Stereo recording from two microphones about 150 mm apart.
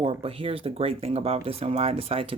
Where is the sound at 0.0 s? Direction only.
40° right (ahead or behind).